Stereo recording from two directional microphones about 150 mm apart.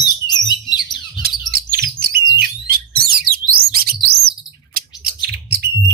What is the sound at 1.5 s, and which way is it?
Bird, 90° right.